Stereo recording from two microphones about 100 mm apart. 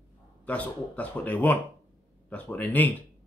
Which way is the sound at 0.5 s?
15° left (ahead or behind).